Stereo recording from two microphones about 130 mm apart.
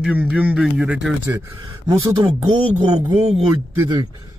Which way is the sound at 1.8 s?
30° right (ahead or behind).